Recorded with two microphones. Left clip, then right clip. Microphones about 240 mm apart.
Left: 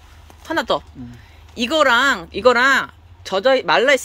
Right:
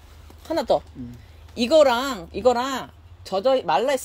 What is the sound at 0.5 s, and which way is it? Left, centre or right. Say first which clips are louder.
Speech: left 2 dB; centre.